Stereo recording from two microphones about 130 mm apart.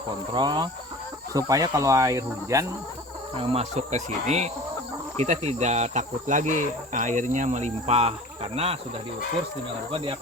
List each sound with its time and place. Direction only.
0.3 s speech: 35° right (ahead or behind)
3.3 s cricket: 50° right (ahead or behind)
9.9 s speech: 45° right (ahead or behind)